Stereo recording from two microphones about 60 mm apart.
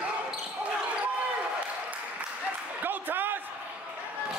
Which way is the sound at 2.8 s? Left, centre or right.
Right.